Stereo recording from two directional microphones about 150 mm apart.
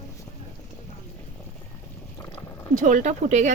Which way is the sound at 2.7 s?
55° right (ahead or behind).